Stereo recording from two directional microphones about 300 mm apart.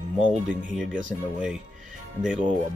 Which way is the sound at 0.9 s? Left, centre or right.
Right.